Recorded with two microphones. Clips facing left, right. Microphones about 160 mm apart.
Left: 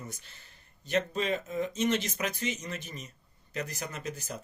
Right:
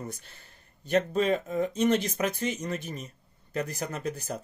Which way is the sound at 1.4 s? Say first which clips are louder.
Right 4 dB; 35° right (ahead or behind).